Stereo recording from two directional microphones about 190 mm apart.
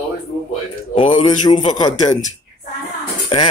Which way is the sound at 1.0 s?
25° left (ahead or behind).